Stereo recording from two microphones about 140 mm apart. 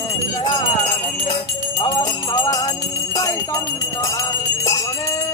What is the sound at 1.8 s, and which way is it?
Jingle bell, 30° left (ahead or behind).